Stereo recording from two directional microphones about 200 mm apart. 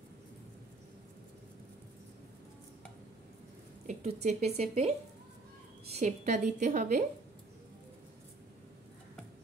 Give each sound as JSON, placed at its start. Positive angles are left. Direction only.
{"t": 3.8, "sound": "a woman's voice", "side_deg": -35}
{"t": 5.9, "sound": "a woman's voice", "side_deg": -35}